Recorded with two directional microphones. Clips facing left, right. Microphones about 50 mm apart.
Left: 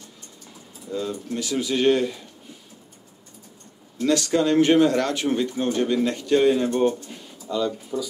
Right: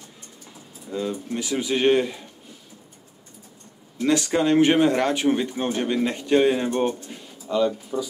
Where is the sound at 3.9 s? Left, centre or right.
Centre.